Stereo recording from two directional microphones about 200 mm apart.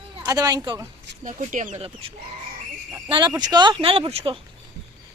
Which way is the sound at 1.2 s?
40° right (ahead or behind).